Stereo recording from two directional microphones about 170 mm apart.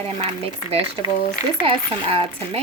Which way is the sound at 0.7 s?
35° right (ahead or behind).